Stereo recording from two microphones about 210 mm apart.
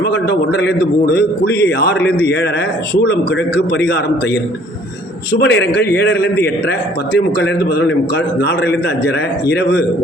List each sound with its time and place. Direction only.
0.0 s a man's voice: 50° left (ahead or behind)
3.7 s a man's voice: 50° left (ahead or behind)
5.3 s a man's voice: 55° left (ahead or behind)
7.4 s a man's voice: 50° left (ahead or behind)